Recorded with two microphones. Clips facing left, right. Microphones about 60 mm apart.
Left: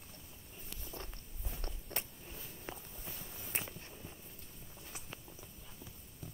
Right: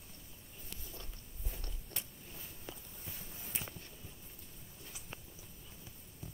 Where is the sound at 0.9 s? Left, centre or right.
Left.